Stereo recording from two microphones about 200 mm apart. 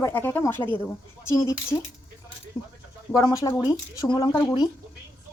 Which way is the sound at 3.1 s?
15° left (ahead or behind).